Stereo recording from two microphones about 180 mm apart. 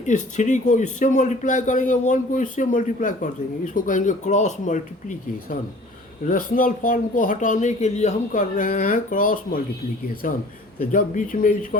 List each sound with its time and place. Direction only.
0.0 s speech: 40° left (ahead or behind)